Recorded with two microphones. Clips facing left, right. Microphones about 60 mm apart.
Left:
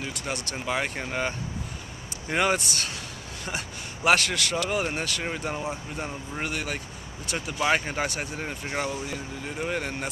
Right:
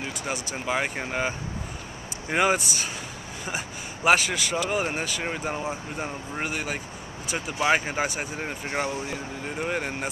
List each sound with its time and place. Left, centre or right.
0.0 s speech: centre
8.6 s speech: right
9.1 s speech: centre